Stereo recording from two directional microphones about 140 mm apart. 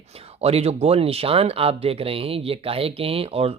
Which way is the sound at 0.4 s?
45° right (ahead or behind).